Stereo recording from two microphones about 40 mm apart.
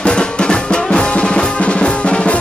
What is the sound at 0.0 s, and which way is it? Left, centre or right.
Music, left.